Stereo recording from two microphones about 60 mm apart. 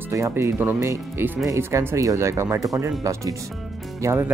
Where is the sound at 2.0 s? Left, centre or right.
Right.